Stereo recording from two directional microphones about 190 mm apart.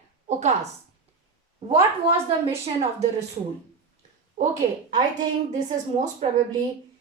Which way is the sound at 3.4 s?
30° right (ahead or behind).